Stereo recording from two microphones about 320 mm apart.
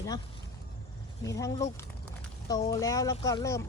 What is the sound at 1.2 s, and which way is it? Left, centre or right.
Speech, centre.